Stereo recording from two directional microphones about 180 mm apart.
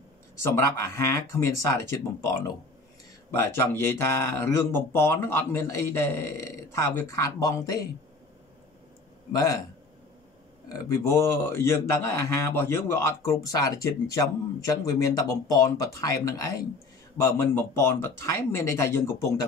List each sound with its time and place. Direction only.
0.4 s a man's voice: 15° left (ahead or behind)
9.3 s speech: 20° left (ahead or behind)
10.7 s a man's voice: 20° left (ahead or behind)